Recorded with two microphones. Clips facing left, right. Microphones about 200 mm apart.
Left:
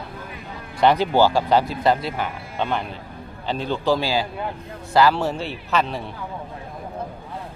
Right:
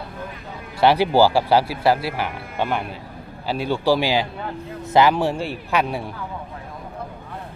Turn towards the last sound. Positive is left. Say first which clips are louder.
# right 1 dB
turn(degrees=-10)  # may be behind; listen again after turning